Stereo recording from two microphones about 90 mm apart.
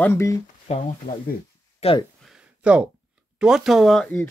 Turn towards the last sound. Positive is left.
turn(degrees=0)  # may be behind; listen again after turning